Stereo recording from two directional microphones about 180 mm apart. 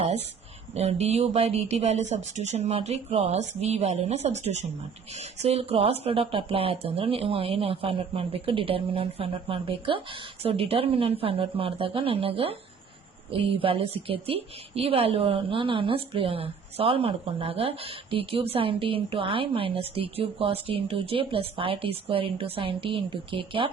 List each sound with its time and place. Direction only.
0.7 s a woman's voice: 35° right (ahead or behind)